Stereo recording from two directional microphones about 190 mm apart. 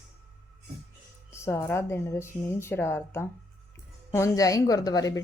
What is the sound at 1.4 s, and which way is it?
A woman's voice, 15° left (ahead or behind).